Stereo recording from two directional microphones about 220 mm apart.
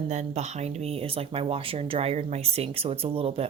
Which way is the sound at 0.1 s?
30° right (ahead or behind).